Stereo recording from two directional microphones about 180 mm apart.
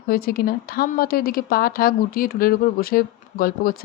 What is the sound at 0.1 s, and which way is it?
Speech, 55° left (ahead or behind).